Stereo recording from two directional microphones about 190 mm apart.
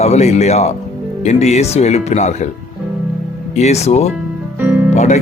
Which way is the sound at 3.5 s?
35° left (ahead or behind).